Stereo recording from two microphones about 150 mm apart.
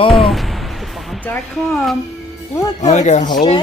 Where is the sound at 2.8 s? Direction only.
50° left (ahead or behind).